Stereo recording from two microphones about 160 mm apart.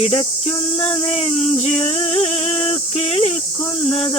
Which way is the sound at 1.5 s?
40° left (ahead or behind).